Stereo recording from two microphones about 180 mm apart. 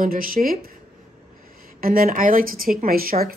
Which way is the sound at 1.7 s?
55° right (ahead or behind).